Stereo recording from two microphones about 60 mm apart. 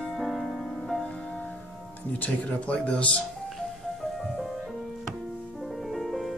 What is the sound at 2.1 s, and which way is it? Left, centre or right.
Speech, left.